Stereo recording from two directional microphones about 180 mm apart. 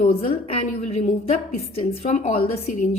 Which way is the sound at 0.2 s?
35° left (ahead or behind).